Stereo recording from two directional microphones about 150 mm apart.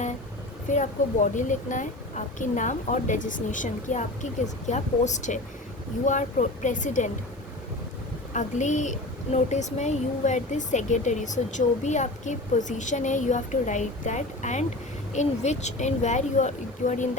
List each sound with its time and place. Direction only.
0.7 s a woman's voice: 55° left (ahead or behind)
8.3 s speech: 55° left (ahead or behind)